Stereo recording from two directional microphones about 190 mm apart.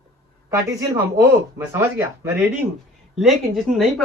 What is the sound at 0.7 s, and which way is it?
Speech, 15° right (ahead or behind).